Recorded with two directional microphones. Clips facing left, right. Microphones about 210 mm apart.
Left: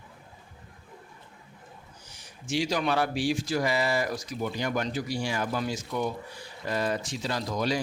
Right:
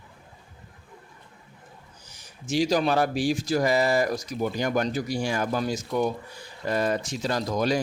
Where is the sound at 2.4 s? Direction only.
40° right (ahead or behind).